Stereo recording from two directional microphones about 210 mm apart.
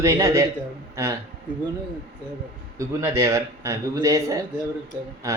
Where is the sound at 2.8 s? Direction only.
15° right (ahead or behind).